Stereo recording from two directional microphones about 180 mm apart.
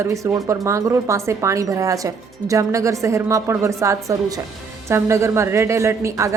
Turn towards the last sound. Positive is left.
turn(degrees=-15)  # may be behind; listen again after turning